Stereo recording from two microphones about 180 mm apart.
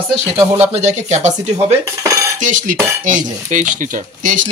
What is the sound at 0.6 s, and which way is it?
Speech, 40° right (ahead or behind).